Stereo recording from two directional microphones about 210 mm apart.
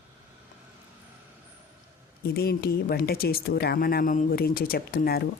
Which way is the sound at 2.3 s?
50° left (ahead or behind).